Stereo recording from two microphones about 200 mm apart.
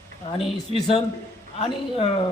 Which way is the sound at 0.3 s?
30° left (ahead or behind).